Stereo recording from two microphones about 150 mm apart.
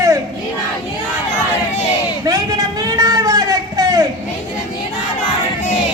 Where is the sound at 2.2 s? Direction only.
25° right (ahead or behind).